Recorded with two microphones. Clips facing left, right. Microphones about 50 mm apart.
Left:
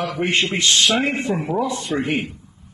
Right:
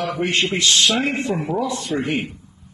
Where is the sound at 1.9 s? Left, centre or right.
Left.